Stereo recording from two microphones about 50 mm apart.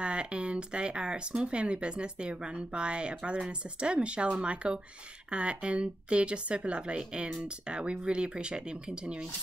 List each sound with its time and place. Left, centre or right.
0.0 s speech: right